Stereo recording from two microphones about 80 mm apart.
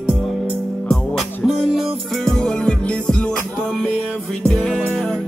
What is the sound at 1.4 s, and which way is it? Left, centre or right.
Music, centre.